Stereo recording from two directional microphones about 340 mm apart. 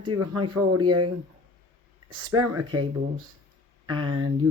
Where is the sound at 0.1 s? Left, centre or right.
Right.